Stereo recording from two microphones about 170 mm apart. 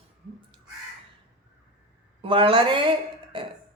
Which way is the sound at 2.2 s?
30° right (ahead or behind).